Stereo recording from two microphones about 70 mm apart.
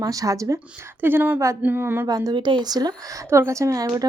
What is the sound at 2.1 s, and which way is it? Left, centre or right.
Speech, right.